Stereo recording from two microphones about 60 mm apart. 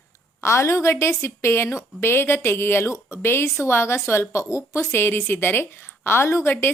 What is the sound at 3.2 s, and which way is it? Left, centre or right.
A woman's voice, left.